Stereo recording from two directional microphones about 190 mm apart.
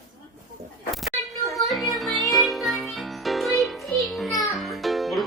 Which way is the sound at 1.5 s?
Centre (ahead or behind).